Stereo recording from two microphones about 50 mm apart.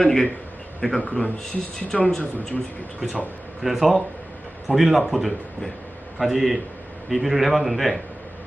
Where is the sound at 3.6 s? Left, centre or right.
Centre.